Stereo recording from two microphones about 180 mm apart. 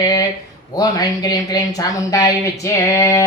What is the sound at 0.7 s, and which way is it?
Speech, 20° left (ahead or behind).